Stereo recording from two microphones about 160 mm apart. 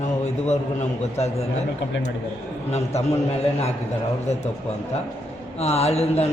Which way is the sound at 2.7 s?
45° left (ahead or behind).